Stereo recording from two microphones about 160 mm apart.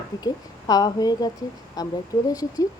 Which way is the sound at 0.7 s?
25° left (ahead or behind).